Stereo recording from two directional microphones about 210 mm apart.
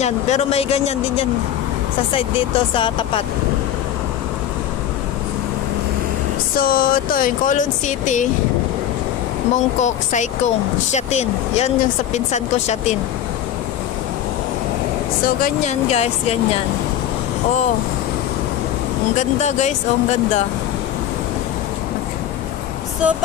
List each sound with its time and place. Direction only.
0.0 s speech: 30° left (ahead or behind)
6.5 s speech: 45° left (ahead or behind)
9.8 s speech: 35° left (ahead or behind)
15.2 s speech: 40° left (ahead or behind)
19.1 s speech: 35° left (ahead or behind)
23.0 s vehicle: 5° right (ahead or behind)